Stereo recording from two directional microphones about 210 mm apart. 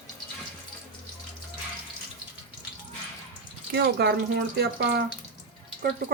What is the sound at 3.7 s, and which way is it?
Speech, 50° right (ahead or behind).